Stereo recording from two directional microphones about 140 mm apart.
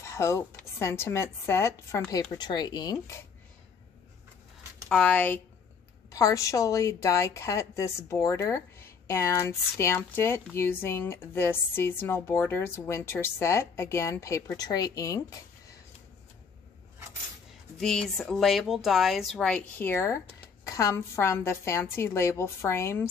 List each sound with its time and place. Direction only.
0.0 s a woman's voice: 20° left (ahead or behind)
4.8 s speech: 10° left (ahead or behind)
6.1 s a woman's voice: 25° left (ahead or behind)
17.7 s a woman's voice: 5° left (ahead or behind); by 23.0 s 20° left (ahead or behind)